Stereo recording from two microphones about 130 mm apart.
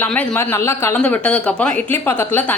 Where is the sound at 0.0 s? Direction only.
10° left (ahead or behind).